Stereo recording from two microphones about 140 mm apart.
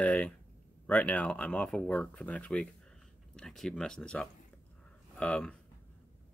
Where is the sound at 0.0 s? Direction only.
10° left (ahead or behind).